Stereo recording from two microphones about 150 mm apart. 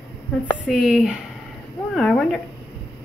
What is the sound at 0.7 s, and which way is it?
Speech, 5° right (ahead or behind).